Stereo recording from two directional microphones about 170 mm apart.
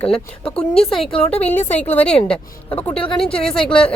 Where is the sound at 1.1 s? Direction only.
35° left (ahead or behind).